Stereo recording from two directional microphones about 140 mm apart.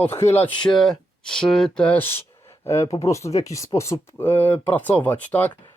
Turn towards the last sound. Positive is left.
turn(degrees=10)  # may be behind; listen again after turning